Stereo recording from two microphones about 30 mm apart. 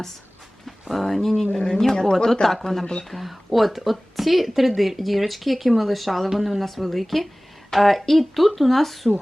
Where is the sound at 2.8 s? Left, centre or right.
Left.